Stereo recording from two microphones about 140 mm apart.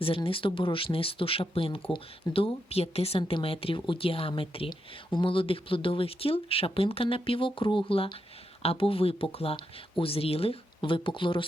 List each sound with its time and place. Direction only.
0.0 s speech: 40° left (ahead or behind)